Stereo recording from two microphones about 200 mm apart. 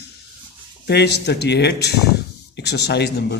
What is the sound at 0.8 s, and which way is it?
Speech, 55° left (ahead or behind).